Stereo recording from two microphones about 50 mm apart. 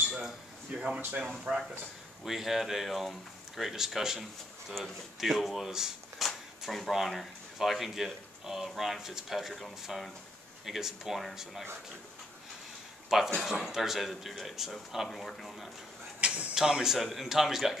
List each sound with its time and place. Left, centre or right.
0.7 s speech: centre
1.5 s speech: right
2.2 s speech: centre
4.7 s speech: centre
13.1 s speech: centre
15.0 s speech: centre
16.2 s speech: right
16.5 s speech: centre